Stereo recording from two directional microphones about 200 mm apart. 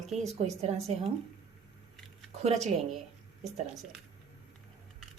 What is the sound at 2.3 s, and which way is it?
Speech, 35° right (ahead or behind).